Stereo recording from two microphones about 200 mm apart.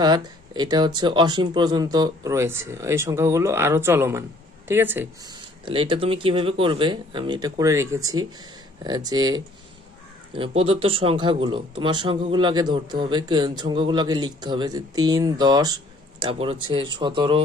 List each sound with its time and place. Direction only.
0.0 s speech: 20° right (ahead or behind)
5.3 s speech: 25° right (ahead or behind)